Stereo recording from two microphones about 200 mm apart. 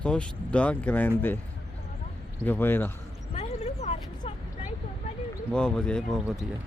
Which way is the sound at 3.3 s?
30° left (ahead or behind).